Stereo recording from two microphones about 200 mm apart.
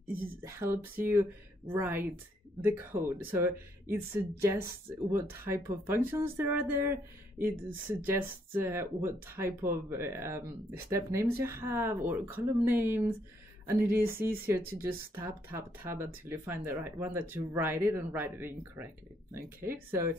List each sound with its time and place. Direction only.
0.0 s a sound: 45° right (ahead or behind)
0.4 s speech: 10° right (ahead or behind)
8.0 s speech: 10° right (ahead or behind)